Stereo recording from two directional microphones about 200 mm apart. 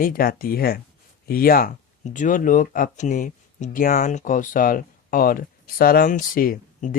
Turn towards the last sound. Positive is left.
turn(degrees=45)  # may be behind; listen again after turning